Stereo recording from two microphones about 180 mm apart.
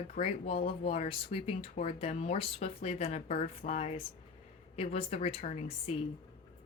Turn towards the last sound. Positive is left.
turn(degrees=35)  # may be behind; listen again after turning